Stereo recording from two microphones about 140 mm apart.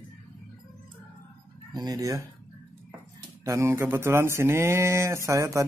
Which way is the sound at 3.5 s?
20° right (ahead or behind).